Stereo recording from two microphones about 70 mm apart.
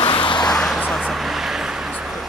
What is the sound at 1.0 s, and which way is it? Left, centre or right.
Vehicle, centre.